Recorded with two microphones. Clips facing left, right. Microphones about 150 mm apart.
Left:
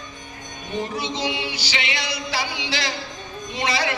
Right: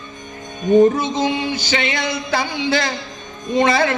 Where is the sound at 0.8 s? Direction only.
50° right (ahead or behind).